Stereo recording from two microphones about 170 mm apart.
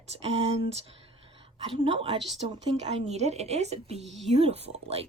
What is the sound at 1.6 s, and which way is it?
Speech, 30° right (ahead or behind).